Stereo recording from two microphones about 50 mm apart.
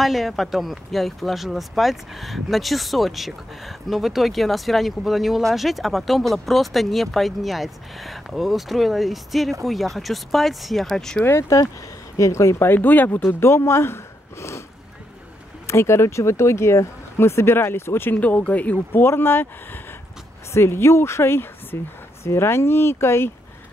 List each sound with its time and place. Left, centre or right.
0.0 s speech: centre
11.2 s speech: left
12.6 s speech: left
13.4 s speech: left
15.6 s speech: left
18.1 s speech: left
19.0 s speech: left
20.5 s speech: left